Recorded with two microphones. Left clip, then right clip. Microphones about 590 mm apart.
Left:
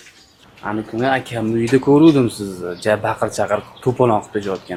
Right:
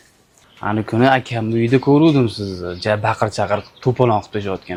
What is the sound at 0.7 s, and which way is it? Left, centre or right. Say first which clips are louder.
Speech: right 4 dB; right.